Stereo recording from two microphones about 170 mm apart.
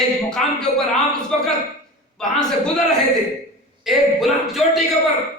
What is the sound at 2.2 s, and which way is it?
Speech, 5° left (ahead or behind).